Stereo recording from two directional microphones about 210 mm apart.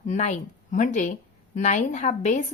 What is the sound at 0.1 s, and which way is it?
A woman's voice, 35° left (ahead or behind).